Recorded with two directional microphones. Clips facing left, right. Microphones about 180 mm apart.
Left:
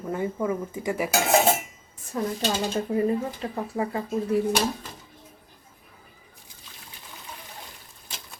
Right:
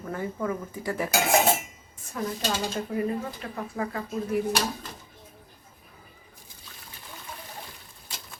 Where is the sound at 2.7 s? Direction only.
30° left (ahead or behind).